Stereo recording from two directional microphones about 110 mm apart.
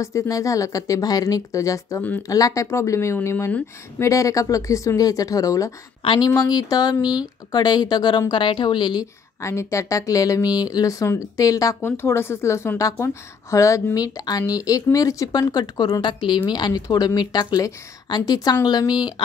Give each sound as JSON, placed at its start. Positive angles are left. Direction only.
{"t": 0.0, "sound": "speech", "side_deg": 30}
{"t": 7.0, "sound": "speech", "side_deg": -10}
{"t": 7.5, "sound": "speech", "side_deg": 40}
{"t": 9.4, "sound": "speech", "side_deg": 25}